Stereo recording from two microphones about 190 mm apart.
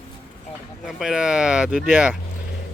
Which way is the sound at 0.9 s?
5° right (ahead or behind).